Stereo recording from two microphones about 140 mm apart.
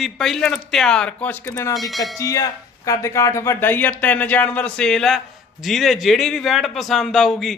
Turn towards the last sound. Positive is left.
turn(degrees=0)  # may be behind; listen again after turning